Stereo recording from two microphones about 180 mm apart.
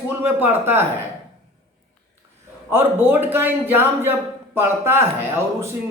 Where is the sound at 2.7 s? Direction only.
10° right (ahead or behind).